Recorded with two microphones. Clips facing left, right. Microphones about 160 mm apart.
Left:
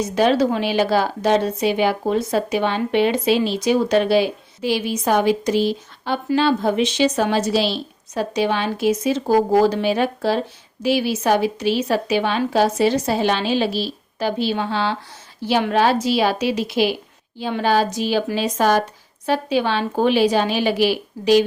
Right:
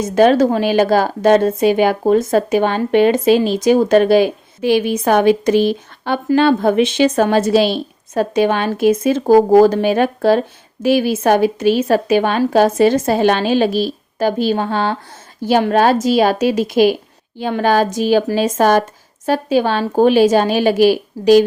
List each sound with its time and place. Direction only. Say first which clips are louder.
0.0 s a woman's voice: right 5 dB; 50° right (ahead or behind)